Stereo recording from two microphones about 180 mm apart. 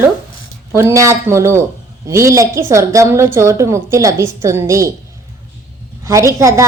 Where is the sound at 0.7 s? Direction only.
15° right (ahead or behind).